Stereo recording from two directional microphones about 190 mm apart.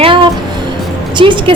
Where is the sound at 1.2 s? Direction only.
25° right (ahead or behind).